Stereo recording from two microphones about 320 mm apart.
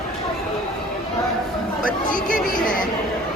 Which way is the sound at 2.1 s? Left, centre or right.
Left.